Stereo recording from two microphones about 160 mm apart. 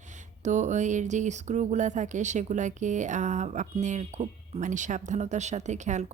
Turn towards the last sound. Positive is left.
turn(degrees=-45)  # may be behind; listen again after turning